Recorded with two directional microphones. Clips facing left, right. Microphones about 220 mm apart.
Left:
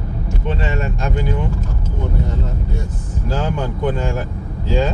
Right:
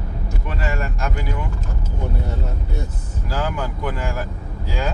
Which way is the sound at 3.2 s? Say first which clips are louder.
Left 4 dB; 25° left (ahead or behind).